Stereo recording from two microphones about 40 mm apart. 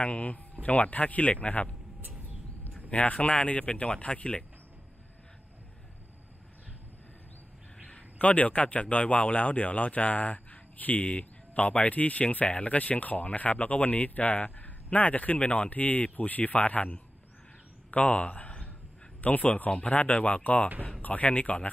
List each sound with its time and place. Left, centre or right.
0.0 s speech: left
2.9 s speech: left
7.8 s a man's voice: left